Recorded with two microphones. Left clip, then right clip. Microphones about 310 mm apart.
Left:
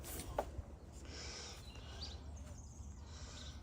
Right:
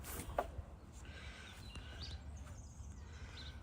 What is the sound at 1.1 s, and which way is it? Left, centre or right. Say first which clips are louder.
Owl: left 5 dB; centre.